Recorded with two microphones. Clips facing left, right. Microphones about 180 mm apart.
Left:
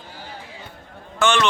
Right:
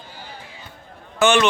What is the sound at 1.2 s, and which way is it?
Speech, 10° right (ahead or behind).